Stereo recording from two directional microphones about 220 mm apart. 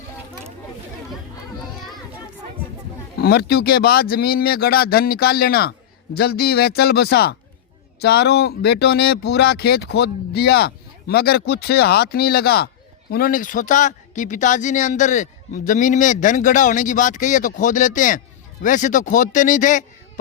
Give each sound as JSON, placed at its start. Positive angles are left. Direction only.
{"t": 3.2, "sound": "speech", "side_deg": 45}